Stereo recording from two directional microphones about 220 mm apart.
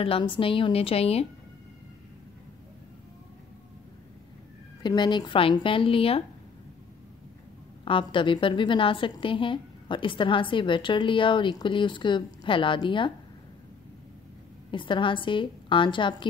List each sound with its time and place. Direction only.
0.0 s a woman's voice: 25° left (ahead or behind)
4.8 s a woman's voice: 20° left (ahead or behind)
7.8 s a woman's voice: 25° left (ahead or behind)
14.7 s a woman's voice: 20° left (ahead or behind)